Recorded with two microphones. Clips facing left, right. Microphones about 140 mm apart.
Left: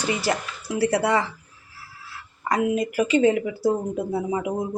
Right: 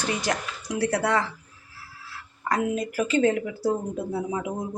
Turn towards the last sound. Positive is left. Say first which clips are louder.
# left 3 dB
turn(degrees=10)  # may be behind; listen again after turning